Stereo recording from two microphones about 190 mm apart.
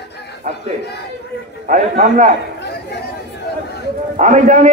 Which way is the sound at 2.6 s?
60° left (ahead or behind).